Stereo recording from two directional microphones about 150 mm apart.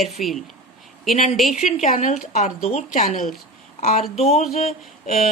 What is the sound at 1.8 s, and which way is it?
A woman's voice, 50° left (ahead or behind).